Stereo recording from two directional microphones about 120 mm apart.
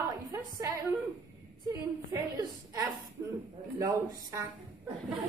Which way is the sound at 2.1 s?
25° right (ahead or behind).